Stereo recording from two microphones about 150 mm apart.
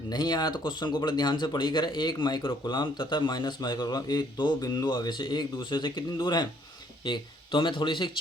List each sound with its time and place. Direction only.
0.1 s speech: 25° left (ahead or behind)